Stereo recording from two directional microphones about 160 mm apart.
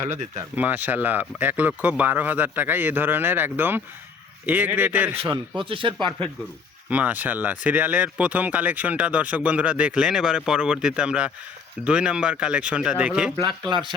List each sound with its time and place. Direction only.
0.0 s speech: 15° right (ahead or behind)
5.6 s speech: 35° right (ahead or behind)
6.9 s speech: 10° right (ahead or behind)
13.4 s speech: 30° right (ahead or behind)